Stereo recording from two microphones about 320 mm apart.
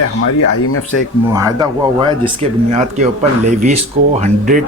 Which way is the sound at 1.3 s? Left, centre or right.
Centre.